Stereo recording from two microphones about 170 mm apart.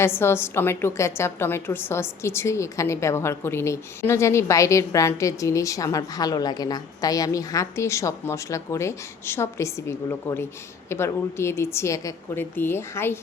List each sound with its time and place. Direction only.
0.0 s a woman's voice: 15° left (ahead or behind)